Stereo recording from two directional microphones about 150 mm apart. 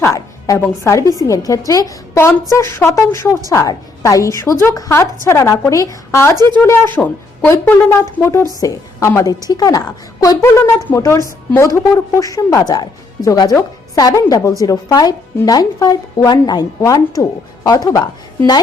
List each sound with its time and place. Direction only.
0.0 s speech: 20° left (ahead or behind)
6.3 s a woman's voice: 30° right (ahead or behind)
6.6 s a woman's voice: 10° left (ahead or behind); by 18.6 s 25° left (ahead or behind)